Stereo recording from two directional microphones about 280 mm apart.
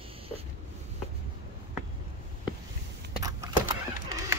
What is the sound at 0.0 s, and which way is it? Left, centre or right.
Wheeze, centre.